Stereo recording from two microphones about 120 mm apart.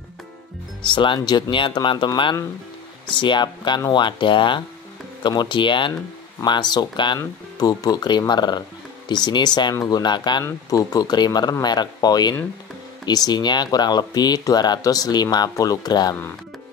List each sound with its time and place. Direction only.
0.8 s speech: 40° left (ahead or behind)